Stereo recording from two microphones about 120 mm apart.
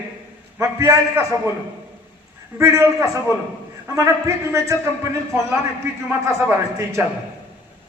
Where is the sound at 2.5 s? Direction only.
25° right (ahead or behind).